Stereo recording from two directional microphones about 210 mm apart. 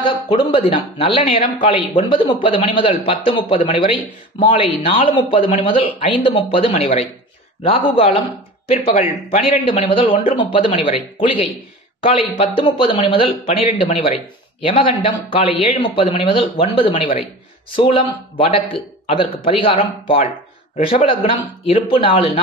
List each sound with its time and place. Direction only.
0.0 s a man's voice: 25° left (ahead or behind)